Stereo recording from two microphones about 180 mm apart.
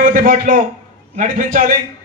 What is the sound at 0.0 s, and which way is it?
A man's voice, 50° right (ahead or behind).